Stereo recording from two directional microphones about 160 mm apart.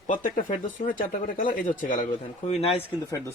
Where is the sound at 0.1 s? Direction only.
55° left (ahead or behind).